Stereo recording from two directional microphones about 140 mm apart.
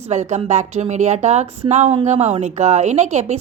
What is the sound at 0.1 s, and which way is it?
A woman's voice, 55° right (ahead or behind).